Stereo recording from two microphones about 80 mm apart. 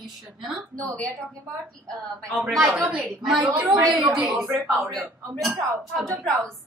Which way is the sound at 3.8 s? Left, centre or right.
Right.